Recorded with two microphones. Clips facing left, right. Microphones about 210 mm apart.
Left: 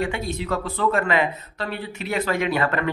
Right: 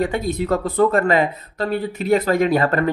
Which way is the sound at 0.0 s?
40° right (ahead or behind).